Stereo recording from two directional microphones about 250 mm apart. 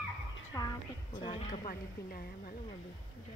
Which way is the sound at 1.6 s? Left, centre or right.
Left.